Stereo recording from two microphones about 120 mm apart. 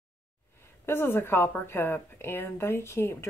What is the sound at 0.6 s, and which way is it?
A woman's voice, 20° left (ahead or behind).